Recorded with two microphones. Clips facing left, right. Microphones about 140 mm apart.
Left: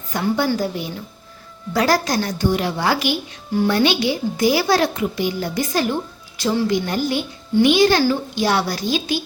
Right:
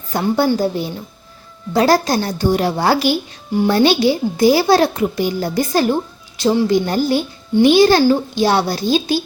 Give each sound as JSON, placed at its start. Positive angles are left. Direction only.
{"t": 0.1, "sound": "a child's voice", "side_deg": -35}